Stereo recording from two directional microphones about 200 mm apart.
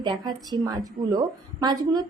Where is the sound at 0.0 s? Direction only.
20° right (ahead or behind).